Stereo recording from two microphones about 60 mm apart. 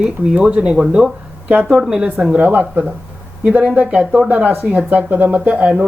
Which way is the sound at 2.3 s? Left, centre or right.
Right.